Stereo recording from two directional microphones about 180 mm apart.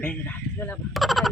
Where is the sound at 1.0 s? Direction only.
Centre (ahead or behind).